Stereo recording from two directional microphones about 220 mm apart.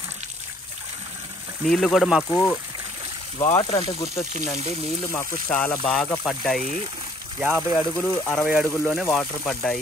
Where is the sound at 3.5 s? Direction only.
25° left (ahead or behind).